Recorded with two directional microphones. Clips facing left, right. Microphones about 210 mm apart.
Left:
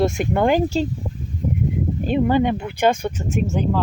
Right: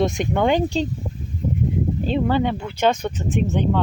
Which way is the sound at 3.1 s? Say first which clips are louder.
Even; 45° left (ahead or behind).